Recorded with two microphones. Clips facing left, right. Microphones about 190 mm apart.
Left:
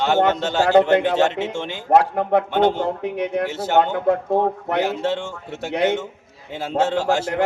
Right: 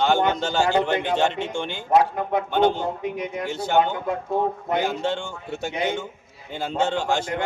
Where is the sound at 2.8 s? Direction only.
70° left (ahead or behind).